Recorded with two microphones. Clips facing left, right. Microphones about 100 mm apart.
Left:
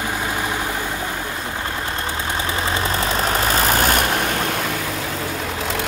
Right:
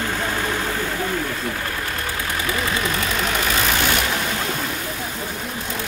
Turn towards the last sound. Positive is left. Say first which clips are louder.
# left 3 dB
turn(degrees=45)  # may be behind; listen again after turning